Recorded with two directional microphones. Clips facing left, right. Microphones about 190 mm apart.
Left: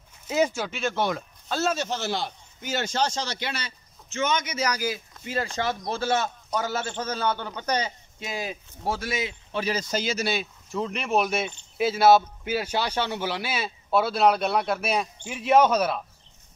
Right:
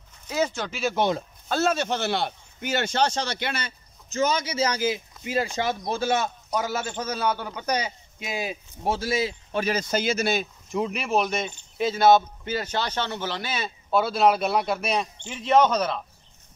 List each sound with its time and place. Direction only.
0.3 s speech: 15° left (ahead or behind)
0.7 s speech: 5° right (ahead or behind)
0.9 s speech: 25° right (ahead or behind)
1.5 s a man's voice: 55° right (ahead or behind)
4.1 s speech: 35° right (ahead or behind); by 8.9 s 15° right (ahead or behind)
8.9 s speech: 30° right (ahead or behind)
9.5 s speech: 50° right (ahead or behind)
10.7 s speech: 10° right (ahead or behind); by 16.0 s 10° left (ahead or behind)